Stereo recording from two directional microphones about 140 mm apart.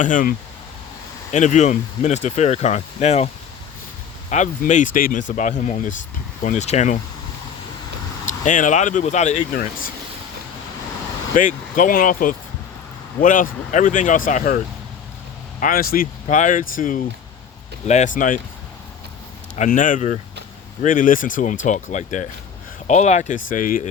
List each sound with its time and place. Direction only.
0.0 s speech: 70° left (ahead or behind)
1.3 s speech: 55° left (ahead or behind)
4.3 s speech: 60° left (ahead or behind)
8.3 s speech: 65° left (ahead or behind); by 9.9 s 90° left
11.3 s speech: 75° left (ahead or behind)
15.6 s speech: 90° left
16.2 s speech: 65° left (ahead or behind)
17.8 s speech: 60° left (ahead or behind)
19.5 s speech: 70° left (ahead or behind)